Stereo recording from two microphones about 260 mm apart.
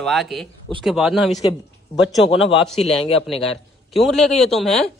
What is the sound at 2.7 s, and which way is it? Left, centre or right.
Speech, left.